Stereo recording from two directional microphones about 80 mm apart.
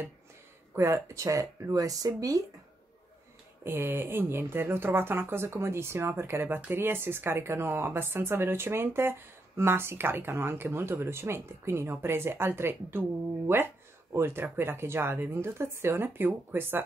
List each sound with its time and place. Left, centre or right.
0.7 s speech: right
3.6 s speech: right